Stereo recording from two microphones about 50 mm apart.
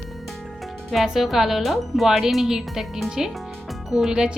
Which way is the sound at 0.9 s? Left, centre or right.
Centre.